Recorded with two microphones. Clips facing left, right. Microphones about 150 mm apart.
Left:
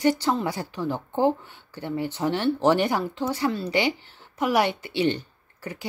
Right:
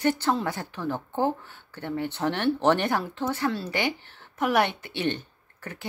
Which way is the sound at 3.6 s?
50° right (ahead or behind).